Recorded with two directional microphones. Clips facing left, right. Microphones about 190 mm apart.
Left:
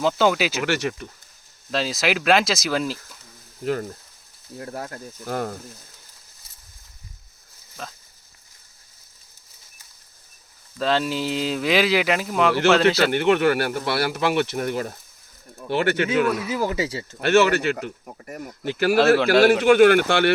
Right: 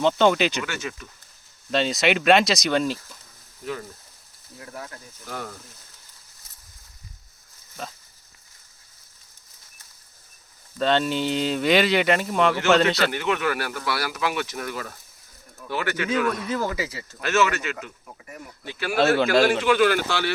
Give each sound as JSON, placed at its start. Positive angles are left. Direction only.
{"t": 0.0, "sound": "speech", "side_deg": 5}
{"t": 0.6, "sound": "speech", "side_deg": 70}
{"t": 1.7, "sound": "speech", "side_deg": 0}
{"t": 4.5, "sound": "speech", "side_deg": 45}
{"t": 7.8, "sound": "speech", "side_deg": -5}
{"t": 10.8, "sound": "speech", "side_deg": 0}
{"t": 13.1, "sound": "speech", "side_deg": 55}
{"t": 13.7, "sound": "speech", "side_deg": 30}
{"t": 16.0, "sound": "speech", "side_deg": 5}
{"t": 16.6, "sound": "speech", "side_deg": 30}
{"t": 17.7, "sound": "speech", "side_deg": 55}
{"t": 18.9, "sound": "speech", "side_deg": 0}
{"t": 19.6, "sound": "speech", "side_deg": 55}